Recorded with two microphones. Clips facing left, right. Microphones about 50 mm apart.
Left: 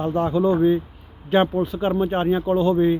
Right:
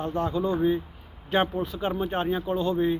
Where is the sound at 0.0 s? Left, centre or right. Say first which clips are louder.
Left 7 dB; left.